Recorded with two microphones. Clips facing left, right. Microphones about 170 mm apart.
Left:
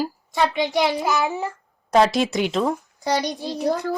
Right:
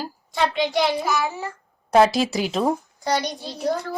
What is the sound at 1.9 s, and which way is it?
Speech, centre (ahead or behind).